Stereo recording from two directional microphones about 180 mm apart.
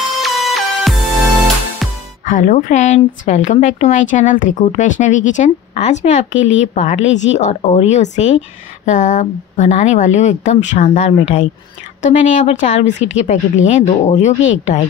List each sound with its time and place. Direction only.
0.2 s music: centre (ahead or behind)
2.2 s a woman's voice: 45° left (ahead or behind)